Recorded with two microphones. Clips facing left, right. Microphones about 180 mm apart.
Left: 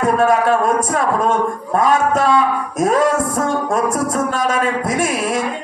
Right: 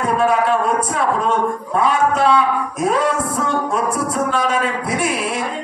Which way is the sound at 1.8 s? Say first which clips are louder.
Left 1 dB; 45° left (ahead or behind).